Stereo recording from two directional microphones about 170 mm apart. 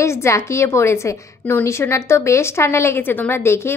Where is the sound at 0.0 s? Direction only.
15° left (ahead or behind).